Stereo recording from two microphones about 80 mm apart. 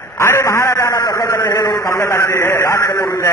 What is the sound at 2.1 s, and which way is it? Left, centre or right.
Speech, left.